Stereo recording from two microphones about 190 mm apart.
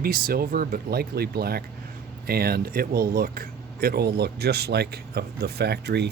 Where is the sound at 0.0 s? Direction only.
55° right (ahead or behind).